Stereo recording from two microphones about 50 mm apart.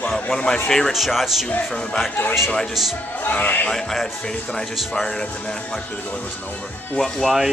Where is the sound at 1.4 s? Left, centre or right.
Centre.